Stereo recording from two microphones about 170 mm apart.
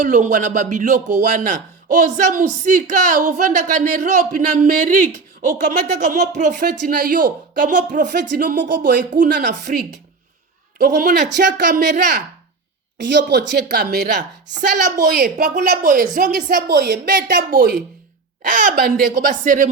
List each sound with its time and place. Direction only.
0.0 s speech: 50° right (ahead or behind)
11.3 s speech: 90° right
13.1 s a woman's voice: 85° right; by 15.3 s 65° right (ahead or behind)
15.4 s a woman's voice: 50° right (ahead or behind)